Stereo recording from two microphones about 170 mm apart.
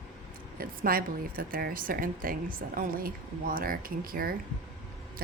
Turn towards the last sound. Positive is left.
turn(degrees=-60)  # may be behind; listen again after turning